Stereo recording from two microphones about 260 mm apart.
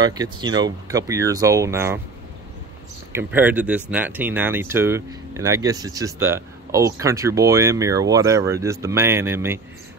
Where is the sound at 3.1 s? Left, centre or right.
Centre.